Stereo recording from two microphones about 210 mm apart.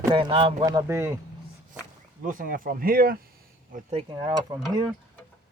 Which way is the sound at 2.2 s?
40° right (ahead or behind).